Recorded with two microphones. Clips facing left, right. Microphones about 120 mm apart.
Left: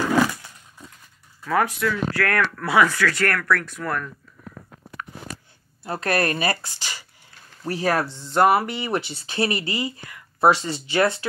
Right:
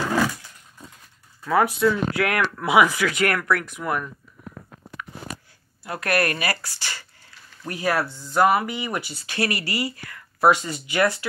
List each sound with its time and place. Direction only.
1.5 s speech: 20° right (ahead or behind)
5.9 s speech: 30° left (ahead or behind)
7.6 s speech: 35° left (ahead or behind)
8.1 s speech: 25° left (ahead or behind)